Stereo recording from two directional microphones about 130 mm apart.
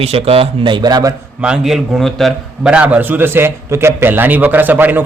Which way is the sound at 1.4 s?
5° right (ahead or behind).